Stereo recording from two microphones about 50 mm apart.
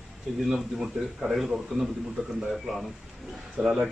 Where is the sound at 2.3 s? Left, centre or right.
Centre.